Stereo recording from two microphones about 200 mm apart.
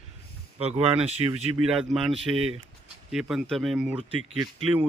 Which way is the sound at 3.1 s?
Centre (ahead or behind).